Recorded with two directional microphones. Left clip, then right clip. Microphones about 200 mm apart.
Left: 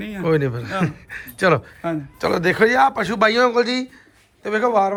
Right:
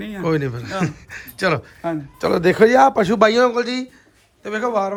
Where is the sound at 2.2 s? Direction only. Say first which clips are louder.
Right 3 dB; 25° right (ahead or behind).